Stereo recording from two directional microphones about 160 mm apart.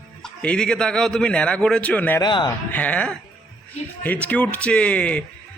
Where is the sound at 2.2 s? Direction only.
30° left (ahead or behind).